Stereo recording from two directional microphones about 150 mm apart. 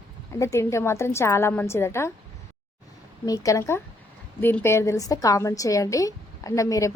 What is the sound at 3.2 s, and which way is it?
A woman's voice, 25° left (ahead or behind).